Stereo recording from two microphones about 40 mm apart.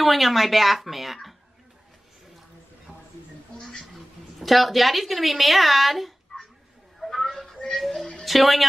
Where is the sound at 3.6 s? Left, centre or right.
Centre.